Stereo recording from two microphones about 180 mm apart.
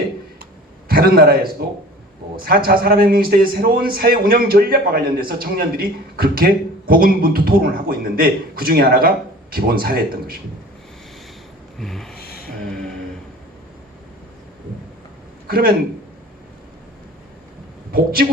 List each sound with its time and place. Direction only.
0.9 s a man's voice: 55° right (ahead or behind)
11.8 s speech: centre (ahead or behind)
12.1 s a sound: 60° left (ahead or behind)
12.6 s a sound: 5° left (ahead or behind)
15.4 s speech: 55° right (ahead or behind)
17.9 s a man's voice: 55° right (ahead or behind)